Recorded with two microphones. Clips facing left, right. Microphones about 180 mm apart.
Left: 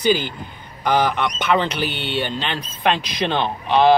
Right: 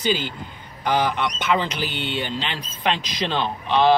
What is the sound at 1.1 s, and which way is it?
Speech, 60° left (ahead or behind).